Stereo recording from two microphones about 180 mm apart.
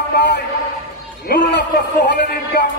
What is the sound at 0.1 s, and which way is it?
A man's voice, 70° left (ahead or behind).